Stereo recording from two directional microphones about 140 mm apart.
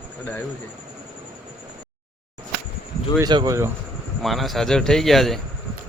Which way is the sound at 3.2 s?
30° right (ahead or behind).